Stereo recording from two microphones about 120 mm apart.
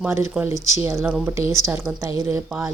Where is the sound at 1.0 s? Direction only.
10° right (ahead or behind).